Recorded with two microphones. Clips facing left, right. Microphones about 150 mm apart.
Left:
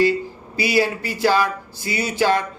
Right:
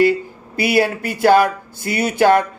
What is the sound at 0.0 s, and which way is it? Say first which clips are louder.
Speech: right 3 dB; 55° right (ahead or behind).